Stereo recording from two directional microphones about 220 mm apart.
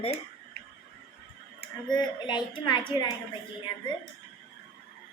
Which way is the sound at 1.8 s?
20° left (ahead or behind).